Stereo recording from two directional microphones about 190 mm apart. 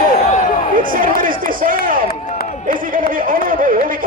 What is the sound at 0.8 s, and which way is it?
Speech, 45° right (ahead or behind).